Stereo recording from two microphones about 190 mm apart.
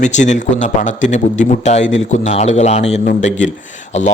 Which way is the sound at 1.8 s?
85° left.